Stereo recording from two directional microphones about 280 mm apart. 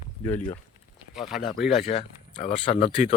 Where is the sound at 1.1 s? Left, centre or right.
Centre.